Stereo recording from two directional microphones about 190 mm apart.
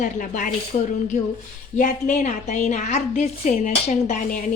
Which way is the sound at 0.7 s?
30° left (ahead or behind).